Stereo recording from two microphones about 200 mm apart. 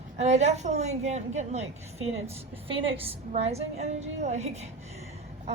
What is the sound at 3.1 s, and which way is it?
A woman's voice, 30° right (ahead or behind).